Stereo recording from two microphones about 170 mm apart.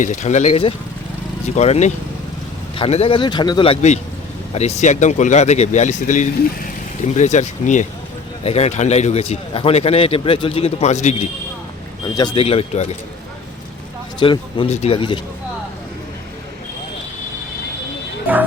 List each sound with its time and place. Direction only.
0.0 s a man's voice: 45° left (ahead or behind)
12.1 s a man's voice: 25° left (ahead or behind)
14.2 s a man's voice: 30° left (ahead or behind)
18.3 s speech: 10° right (ahead or behind)